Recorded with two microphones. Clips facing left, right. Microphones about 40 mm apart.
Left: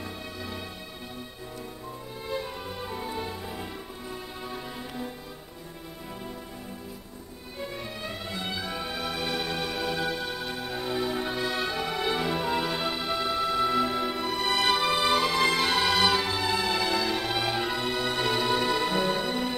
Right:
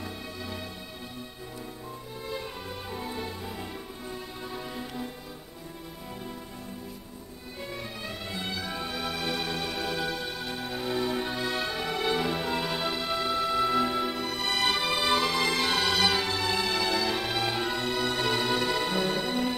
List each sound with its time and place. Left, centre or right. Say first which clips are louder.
0.0 s music: left 1 dB; centre
2.9 s music: left 1 dB; centre
7.6 s music: left 2 dB; centre